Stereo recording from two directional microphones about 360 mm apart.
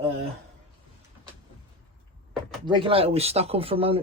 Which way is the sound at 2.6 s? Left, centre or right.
Centre.